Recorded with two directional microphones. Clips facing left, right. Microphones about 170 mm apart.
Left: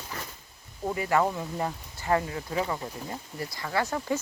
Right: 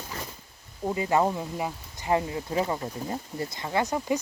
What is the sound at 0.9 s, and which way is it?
Speech, 20° right (ahead or behind).